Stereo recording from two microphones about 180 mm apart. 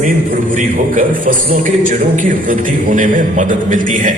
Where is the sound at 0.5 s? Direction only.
50° right (ahead or behind).